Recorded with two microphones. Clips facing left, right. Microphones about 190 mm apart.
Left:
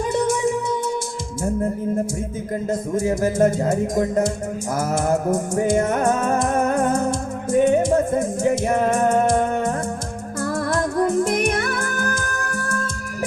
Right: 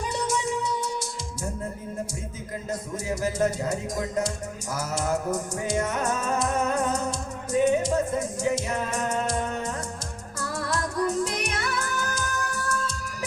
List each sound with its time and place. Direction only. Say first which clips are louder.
0.0 s music: left 8 dB; 50° left (ahead or behind)
2.6 s speech: left 9 dB; 50° left (ahead or behind)
4.7 s music: left 7 dB; 50° left (ahead or behind)